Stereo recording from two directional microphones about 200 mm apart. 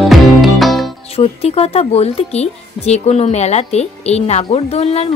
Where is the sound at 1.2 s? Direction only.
30° left (ahead or behind).